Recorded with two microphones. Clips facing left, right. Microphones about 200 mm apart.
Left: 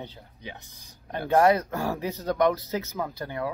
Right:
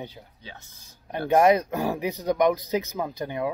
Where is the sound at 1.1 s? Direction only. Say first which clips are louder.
Right 2 dB; 15° right (ahead or behind).